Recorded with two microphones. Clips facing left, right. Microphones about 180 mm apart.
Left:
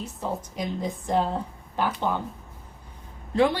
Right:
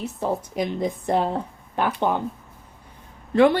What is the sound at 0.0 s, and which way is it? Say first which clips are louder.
A woman's voice: right 5 dB; 65° right (ahead or behind).